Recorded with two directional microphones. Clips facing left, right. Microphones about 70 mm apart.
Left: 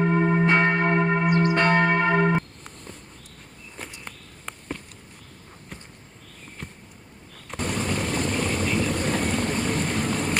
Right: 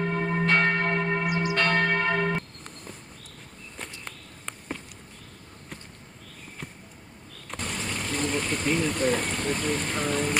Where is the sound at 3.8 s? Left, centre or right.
Centre.